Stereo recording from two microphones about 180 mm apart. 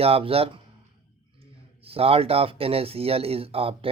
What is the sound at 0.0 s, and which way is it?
Speech, 35° right (ahead or behind).